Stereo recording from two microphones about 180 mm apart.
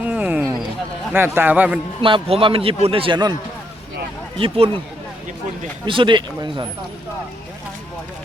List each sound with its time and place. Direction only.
0.0 s a sound: 10° right (ahead or behind)
1.1 s a man's voice: 10° right (ahead or behind)
2.0 s a man's voice: 30° right (ahead or behind)
4.4 s speech: 30° right (ahead or behind)
5.8 s speech: 25° right (ahead or behind)